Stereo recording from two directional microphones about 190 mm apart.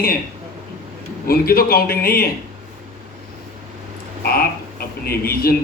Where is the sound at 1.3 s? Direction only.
50° left (ahead or behind).